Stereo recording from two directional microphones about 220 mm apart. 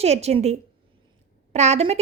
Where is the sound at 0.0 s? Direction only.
30° right (ahead or behind).